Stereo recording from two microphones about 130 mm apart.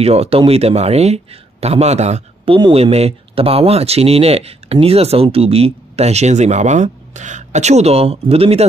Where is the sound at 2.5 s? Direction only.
45° right (ahead or behind).